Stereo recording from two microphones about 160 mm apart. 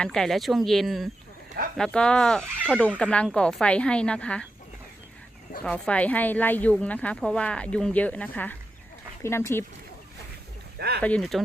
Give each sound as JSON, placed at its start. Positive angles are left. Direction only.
{"t": 0.0, "sound": "speech", "side_deg": 5}
{"t": 5.6, "sound": "speech", "side_deg": 5}
{"t": 10.8, "sound": "a sound", "side_deg": -80}
{"t": 11.0, "sound": "speech", "side_deg": 5}